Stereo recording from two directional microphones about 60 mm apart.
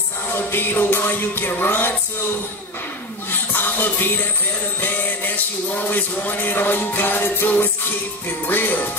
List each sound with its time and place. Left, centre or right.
0.5 s music: left
3.3 s music: left
5.8 s music: left